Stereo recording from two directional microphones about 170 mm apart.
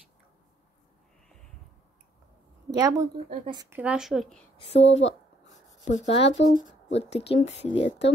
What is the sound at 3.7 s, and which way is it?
Speech, 5° right (ahead or behind).